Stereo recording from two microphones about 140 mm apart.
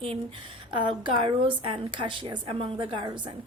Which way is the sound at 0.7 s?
35° right (ahead or behind).